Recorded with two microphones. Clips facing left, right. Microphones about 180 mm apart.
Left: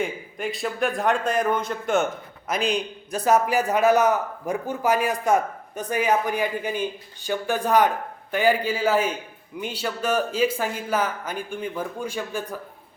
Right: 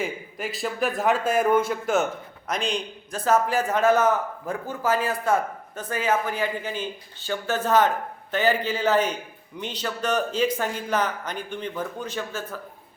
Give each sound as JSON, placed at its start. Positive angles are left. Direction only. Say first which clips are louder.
{"t": 0.0, "sound": "a man's voice", "louder": "left 2 dB", "side_deg": 0}
{"t": 2.5, "sound": "a man's voice", "louder": "left 3 dB", "side_deg": 5}